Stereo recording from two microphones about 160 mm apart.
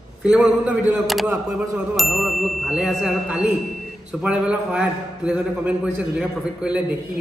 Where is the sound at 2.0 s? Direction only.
Centre (ahead or behind).